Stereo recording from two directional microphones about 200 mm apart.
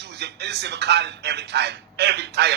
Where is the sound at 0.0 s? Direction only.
55° right (ahead or behind).